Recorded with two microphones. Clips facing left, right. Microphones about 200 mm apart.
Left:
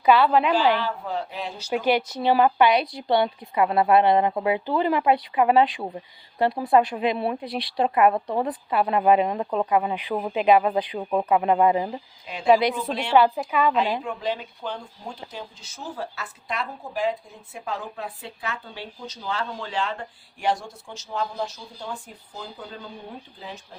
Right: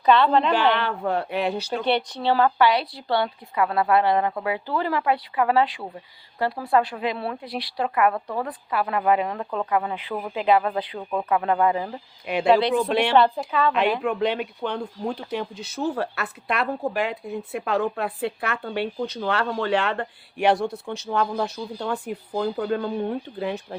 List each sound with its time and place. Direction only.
0.0 s a woman's voice: 10° left (ahead or behind)
0.5 s speech: 60° right (ahead or behind)
1.7 s speech: 10° left (ahead or behind)
12.2 s speech: 65° right (ahead or behind)
13.1 s a woman's voice: 5° left (ahead or behind)
14.0 s speech: 65° right (ahead or behind)